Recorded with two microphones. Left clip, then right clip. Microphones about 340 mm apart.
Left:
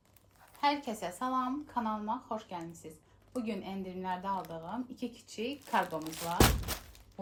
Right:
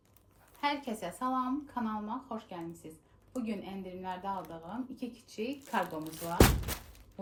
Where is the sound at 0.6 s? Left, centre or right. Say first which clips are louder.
Left 2 dB; centre.